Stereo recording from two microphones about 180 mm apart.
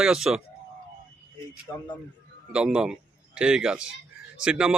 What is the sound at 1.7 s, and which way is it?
Speech, 15° left (ahead or behind).